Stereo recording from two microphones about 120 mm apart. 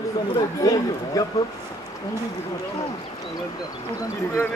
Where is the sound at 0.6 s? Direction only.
30° left (ahead or behind).